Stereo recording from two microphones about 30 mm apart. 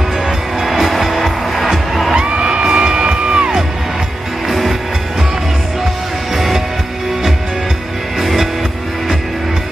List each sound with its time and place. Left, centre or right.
0.6 s music: centre
2.1 s music: right
4.5 s music: centre
8.2 s music: centre